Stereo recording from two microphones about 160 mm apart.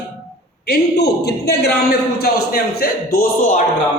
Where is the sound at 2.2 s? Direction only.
70° left (ahead or behind); by 3.6 s 55° left (ahead or behind).